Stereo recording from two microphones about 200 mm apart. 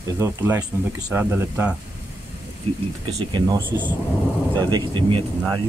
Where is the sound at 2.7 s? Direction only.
30° right (ahead or behind).